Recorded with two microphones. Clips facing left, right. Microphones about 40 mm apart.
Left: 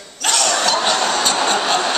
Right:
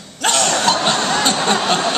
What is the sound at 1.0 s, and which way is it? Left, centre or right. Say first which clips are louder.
Snicker: right 1 dB; right.